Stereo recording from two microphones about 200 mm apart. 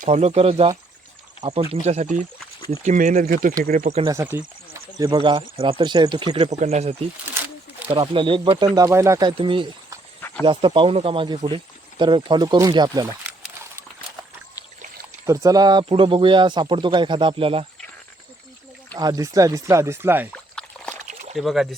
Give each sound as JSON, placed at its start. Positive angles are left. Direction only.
{"t": 0.0, "sound": "speech", "side_deg": -35}
{"t": 4.0, "sound": "speech", "side_deg": -15}
{"t": 10.2, "sound": "snake", "side_deg": 10}
{"t": 10.4, "sound": "speech", "side_deg": -25}
{"t": 13.2, "sound": "a sound", "side_deg": -10}
{"t": 14.6, "sound": "trickle", "side_deg": 15}
{"t": 15.3, "sound": "speech", "side_deg": -20}
{"t": 18.9, "sound": "speech", "side_deg": -20}
{"t": 20.3, "sound": "a sound", "side_deg": 5}
{"t": 20.9, "sound": "a sound", "side_deg": -35}
{"t": 21.3, "sound": "speech", "side_deg": 0}